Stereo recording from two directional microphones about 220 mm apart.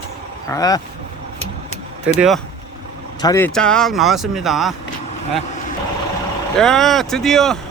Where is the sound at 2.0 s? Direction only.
5° right (ahead or behind).